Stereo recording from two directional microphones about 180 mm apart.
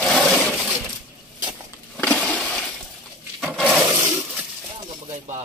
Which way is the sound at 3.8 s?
20° right (ahead or behind).